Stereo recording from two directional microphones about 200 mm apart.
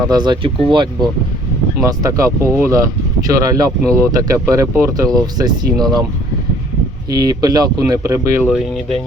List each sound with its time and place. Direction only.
0.0 s speech: 20° right (ahead or behind)
7.1 s speech: 20° right (ahead or behind)
8.4 s speech: centre (ahead or behind)